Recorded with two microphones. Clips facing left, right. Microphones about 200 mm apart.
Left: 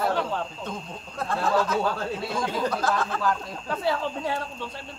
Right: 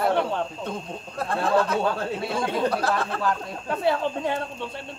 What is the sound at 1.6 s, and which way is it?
Speech, 25° right (ahead or behind).